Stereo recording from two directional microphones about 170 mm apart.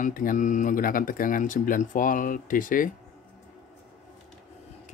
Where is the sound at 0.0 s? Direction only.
50° left (ahead or behind).